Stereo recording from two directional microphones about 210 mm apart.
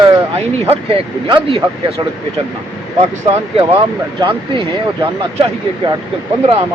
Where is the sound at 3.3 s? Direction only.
25° right (ahead or behind).